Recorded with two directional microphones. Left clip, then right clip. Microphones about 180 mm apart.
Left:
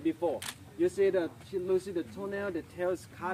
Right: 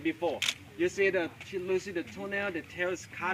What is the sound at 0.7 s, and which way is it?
Speech, 15° right (ahead or behind).